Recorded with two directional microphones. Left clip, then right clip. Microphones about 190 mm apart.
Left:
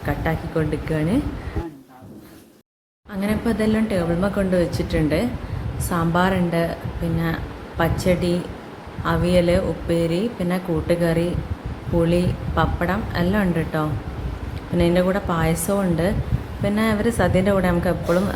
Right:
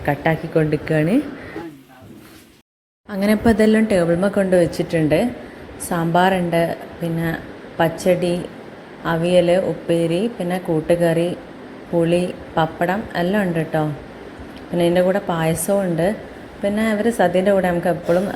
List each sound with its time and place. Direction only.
0.0 s a woman's voice: 20° right (ahead or behind)
3.1 s a woman's voice: 30° right (ahead or behind); by 6.7 s 15° right (ahead or behind)
7.8 s a woman's voice: 10° right (ahead or behind)